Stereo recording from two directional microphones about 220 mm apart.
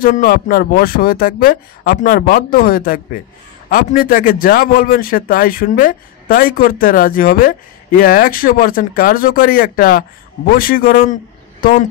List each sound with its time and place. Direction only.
0.0 s a man's voice: 40° left (ahead or behind)